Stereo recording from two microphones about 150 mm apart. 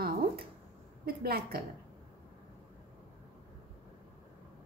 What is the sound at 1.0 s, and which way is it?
Speech, 90° right.